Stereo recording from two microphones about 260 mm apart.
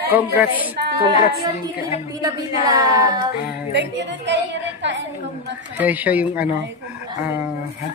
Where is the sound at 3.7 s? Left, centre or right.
Right.